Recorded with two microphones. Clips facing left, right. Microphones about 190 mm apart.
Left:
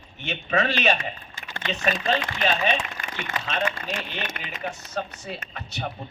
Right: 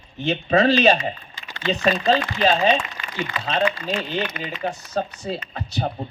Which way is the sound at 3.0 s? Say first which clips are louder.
Even; 45° left (ahead or behind).